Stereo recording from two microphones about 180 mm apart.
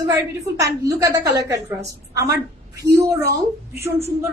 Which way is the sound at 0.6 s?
20° right (ahead or behind).